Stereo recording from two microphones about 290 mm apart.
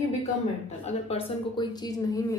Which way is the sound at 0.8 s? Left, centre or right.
Centre.